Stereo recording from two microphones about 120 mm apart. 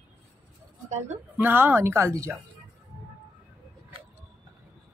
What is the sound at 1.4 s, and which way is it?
Speech, 15° right (ahead or behind).